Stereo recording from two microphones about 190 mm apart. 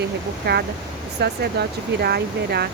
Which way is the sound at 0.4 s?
60° right (ahead or behind).